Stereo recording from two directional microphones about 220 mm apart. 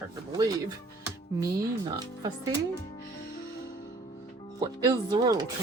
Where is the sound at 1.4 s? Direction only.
15° right (ahead or behind).